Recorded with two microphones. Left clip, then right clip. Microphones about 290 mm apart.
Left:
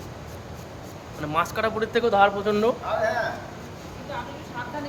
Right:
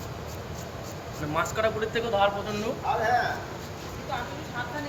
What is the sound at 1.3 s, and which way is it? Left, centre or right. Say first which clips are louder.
Speech: left 2 dB; centre.